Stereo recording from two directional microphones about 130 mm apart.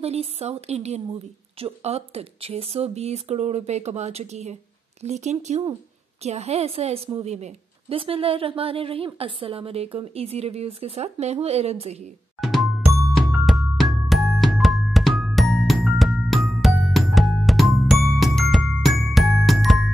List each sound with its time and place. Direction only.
0.0 s a woman's voice: 55° right (ahead or behind)
12.4 s music: centre (ahead or behind)